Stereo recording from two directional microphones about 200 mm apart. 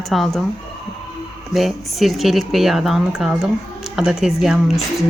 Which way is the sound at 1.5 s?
Centre (ahead or behind).